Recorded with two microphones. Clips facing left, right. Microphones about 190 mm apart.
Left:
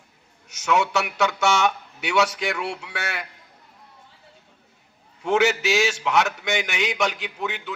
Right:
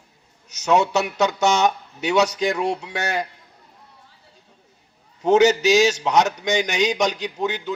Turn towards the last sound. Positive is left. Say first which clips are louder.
# right 5 dB
turn(degrees=-35)  # may be behind; listen again after turning